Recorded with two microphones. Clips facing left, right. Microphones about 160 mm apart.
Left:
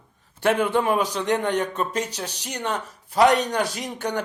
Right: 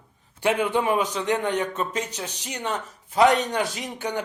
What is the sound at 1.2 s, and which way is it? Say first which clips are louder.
Speech: left 1 dB; 5° right (ahead or behind).